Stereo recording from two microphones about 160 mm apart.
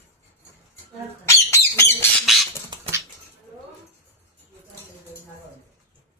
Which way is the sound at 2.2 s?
Centre (ahead or behind).